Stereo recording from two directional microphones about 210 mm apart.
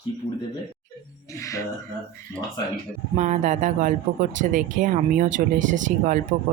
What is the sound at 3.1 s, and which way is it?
Speech, 35° right (ahead or behind).